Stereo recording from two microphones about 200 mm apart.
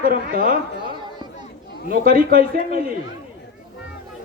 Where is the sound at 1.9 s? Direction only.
45° right (ahead or behind).